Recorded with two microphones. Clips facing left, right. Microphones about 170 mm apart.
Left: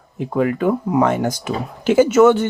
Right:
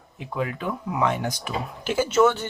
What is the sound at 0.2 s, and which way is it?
Speech, 50° left (ahead or behind).